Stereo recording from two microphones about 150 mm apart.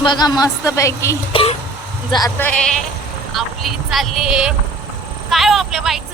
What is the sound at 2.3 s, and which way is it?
Speech, 10° left (ahead or behind).